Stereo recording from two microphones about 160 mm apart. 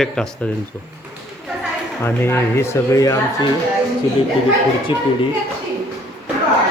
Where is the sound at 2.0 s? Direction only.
15° left (ahead or behind).